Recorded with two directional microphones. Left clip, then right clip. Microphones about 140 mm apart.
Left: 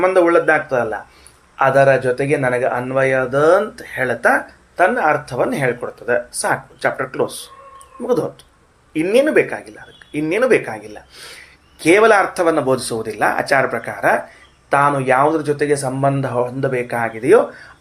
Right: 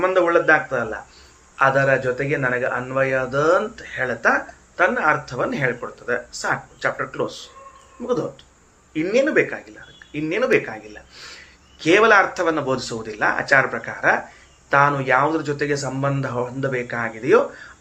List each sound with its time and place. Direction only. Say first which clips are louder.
0.0 s speech: left 4 dB; 40° left (ahead or behind)
3.8 s speech: left 4 dB; 40° left (ahead or behind)
8.9 s speech: left 5 dB; 40° left (ahead or behind)